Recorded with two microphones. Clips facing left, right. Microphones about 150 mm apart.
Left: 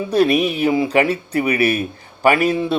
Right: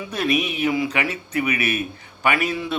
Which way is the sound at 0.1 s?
35° left (ahead or behind).